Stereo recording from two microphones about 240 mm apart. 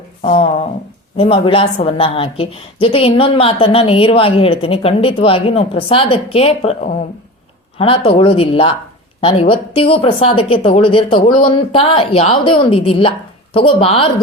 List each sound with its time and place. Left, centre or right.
0.3 s speech: left